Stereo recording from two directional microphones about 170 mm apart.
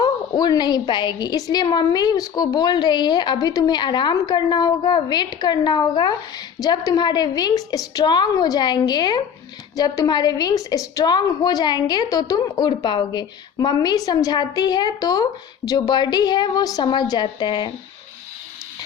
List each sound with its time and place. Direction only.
0.0 s a woman's voice: 25° left (ahead or behind)